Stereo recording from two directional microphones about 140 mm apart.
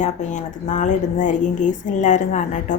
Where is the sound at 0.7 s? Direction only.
60° left (ahead or behind).